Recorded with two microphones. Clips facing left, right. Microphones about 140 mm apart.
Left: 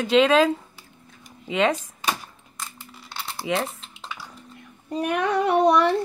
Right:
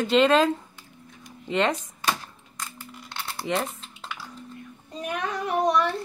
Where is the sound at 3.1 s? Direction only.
5° left (ahead or behind).